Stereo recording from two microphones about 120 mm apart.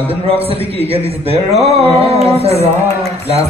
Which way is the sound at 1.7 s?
60° right (ahead or behind).